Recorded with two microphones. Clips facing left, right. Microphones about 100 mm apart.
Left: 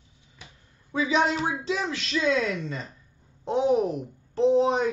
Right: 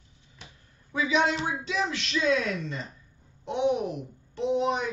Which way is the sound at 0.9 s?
35° left (ahead or behind).